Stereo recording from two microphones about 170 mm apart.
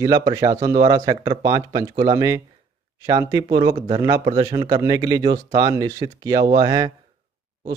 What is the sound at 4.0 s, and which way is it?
A man's voice, 20° right (ahead or behind).